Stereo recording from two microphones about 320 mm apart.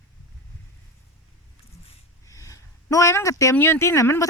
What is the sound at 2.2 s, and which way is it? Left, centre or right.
Speech, centre.